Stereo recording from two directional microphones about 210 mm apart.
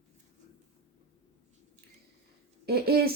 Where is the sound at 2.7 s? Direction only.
50° right (ahead or behind).